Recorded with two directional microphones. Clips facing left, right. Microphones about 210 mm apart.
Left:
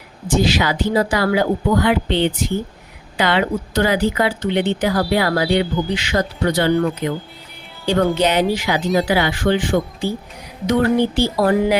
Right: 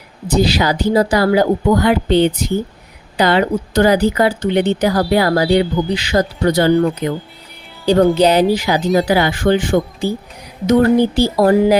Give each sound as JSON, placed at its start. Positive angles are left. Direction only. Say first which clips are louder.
{"t": 0.3, "sound": "speech", "louder": "right 3 dB", "side_deg": -35}
{"t": 8.2, "sound": "speech", "louder": "right 5 dB", "side_deg": -35}